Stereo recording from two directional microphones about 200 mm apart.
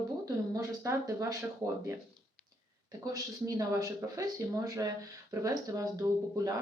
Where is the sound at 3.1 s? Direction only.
15° right (ahead or behind).